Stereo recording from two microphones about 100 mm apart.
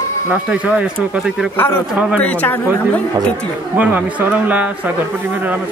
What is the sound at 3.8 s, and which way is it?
Speech, 15° right (ahead or behind).